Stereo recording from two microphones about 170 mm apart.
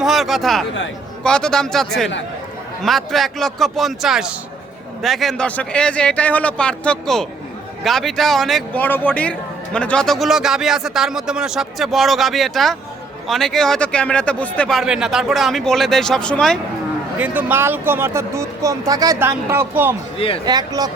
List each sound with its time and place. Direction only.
0.0 s a man's voice: centre (ahead or behind)
17.2 s speech: 10° right (ahead or behind)
20.1 s speech: 35° left (ahead or behind)
20.4 s speech: 25° right (ahead or behind)